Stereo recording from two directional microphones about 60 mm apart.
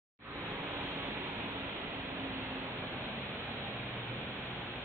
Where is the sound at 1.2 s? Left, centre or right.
Right.